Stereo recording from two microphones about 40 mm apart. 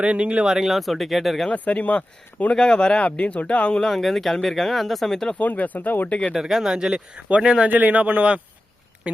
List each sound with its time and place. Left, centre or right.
0.0 s speech: right
0.4 s speech: centre
1.5 s speech: left
2.6 s a man's voice: left
3.9 s speech: centre
5.4 s speech: left
6.1 s a man's voice: left
6.3 s speech: centre; by 7.5 s right
7.7 s speech: right